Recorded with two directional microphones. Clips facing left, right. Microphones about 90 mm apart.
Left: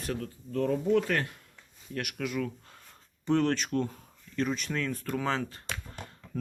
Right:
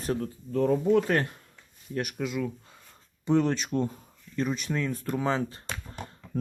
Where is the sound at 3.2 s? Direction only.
10° right (ahead or behind).